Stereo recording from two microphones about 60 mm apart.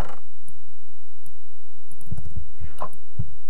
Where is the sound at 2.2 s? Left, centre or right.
Centre.